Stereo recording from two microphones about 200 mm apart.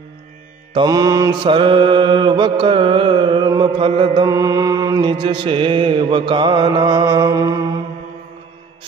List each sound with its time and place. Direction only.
0.7 s mantra: 20° right (ahead or behind)